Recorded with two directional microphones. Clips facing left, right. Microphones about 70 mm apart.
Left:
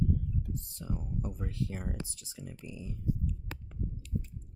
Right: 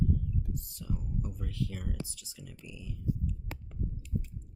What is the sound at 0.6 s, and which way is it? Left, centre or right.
Speech, left.